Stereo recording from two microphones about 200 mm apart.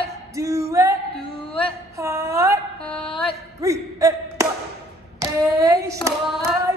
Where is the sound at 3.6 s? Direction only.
15° right (ahead or behind).